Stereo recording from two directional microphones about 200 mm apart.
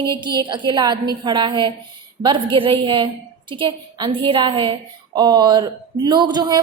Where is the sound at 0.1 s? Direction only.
25° right (ahead or behind).